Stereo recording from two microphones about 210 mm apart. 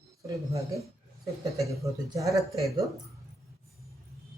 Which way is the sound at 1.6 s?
15° right (ahead or behind).